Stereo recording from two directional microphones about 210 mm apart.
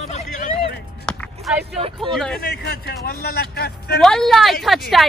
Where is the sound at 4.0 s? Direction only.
Centre (ahead or behind).